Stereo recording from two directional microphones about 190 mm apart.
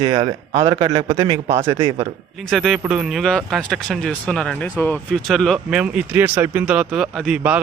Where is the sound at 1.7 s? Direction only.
30° right (ahead or behind).